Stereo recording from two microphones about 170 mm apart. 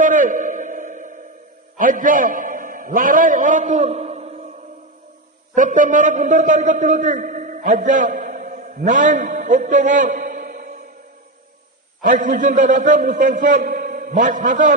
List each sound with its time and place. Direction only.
0.0 s a sound: 50° right (ahead or behind)
1.8 s a man's voice: 50° right (ahead or behind)
5.5 s a man's voice: 50° right (ahead or behind)
12.0 s a man's voice: 50° right (ahead or behind)